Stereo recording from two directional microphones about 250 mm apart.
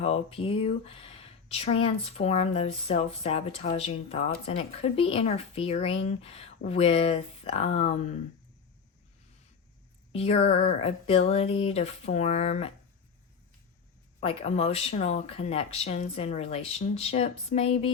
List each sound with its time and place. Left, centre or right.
0.0 s speech: left
10.1 s speech: left
14.2 s speech: left